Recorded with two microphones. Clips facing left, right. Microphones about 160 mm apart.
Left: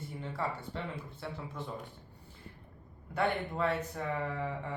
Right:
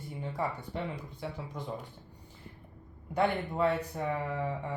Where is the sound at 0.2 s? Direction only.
15° right (ahead or behind).